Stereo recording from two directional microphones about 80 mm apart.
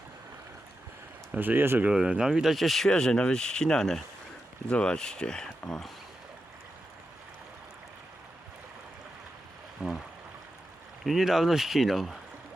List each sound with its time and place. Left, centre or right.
1.4 s speech: right
1.9 s speech: centre
9.8 s a sound: centre
11.0 s speech: centre